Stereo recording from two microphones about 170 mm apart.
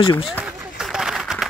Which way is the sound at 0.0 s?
30° left (ahead or behind).